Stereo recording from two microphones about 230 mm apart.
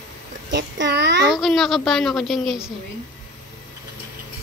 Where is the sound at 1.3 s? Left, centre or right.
Centre.